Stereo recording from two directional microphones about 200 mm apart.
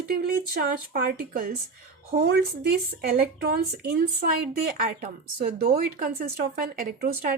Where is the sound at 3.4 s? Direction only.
50° right (ahead or behind).